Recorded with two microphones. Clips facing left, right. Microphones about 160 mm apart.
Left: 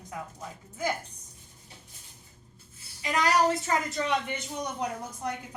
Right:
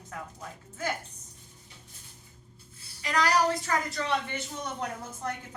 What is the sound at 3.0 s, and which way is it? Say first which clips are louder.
A woman's voice: left 1 dB; 20° left (ahead or behind).